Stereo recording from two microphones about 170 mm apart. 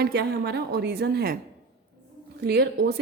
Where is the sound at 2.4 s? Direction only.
70° right (ahead or behind).